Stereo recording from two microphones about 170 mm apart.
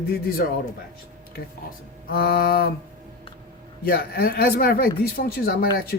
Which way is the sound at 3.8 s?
65° left (ahead or behind).